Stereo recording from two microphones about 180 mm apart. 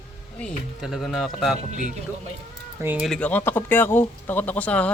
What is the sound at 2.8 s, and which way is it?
Speech, 10° right (ahead or behind).